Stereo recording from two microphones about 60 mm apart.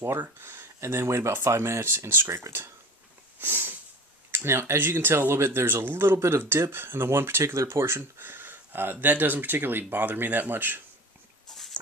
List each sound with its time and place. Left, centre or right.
0.0 s speech: right
3.4 s a sound: right
4.3 s speech: right